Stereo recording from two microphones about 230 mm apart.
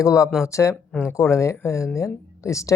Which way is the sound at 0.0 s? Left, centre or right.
Centre.